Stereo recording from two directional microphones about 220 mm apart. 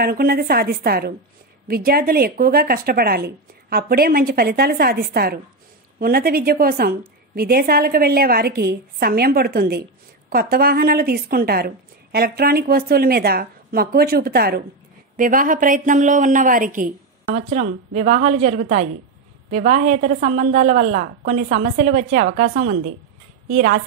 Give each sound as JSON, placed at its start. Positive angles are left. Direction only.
{"t": 0.0, "sound": "a woman's voice", "side_deg": -45}